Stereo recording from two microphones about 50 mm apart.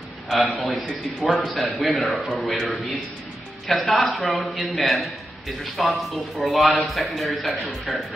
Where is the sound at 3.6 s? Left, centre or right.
Centre.